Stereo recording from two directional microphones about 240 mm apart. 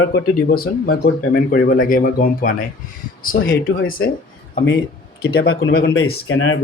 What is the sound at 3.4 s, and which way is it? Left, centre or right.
Speech, left.